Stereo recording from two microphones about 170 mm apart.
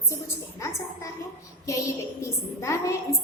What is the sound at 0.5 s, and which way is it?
A woman's voice, 20° left (ahead or behind).